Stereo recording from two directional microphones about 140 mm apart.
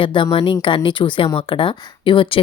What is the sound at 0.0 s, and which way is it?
Speech, 35° left (ahead or behind).